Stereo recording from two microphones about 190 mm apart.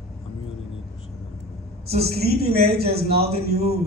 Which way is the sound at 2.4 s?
55° right (ahead or behind).